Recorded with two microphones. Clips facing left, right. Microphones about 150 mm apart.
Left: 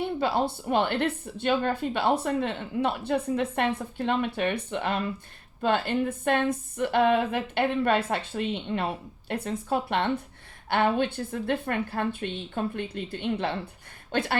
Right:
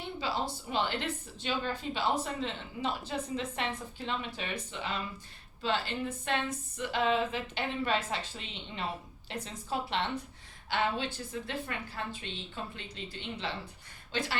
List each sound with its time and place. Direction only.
0.0 s a woman's voice: 55° left (ahead or behind)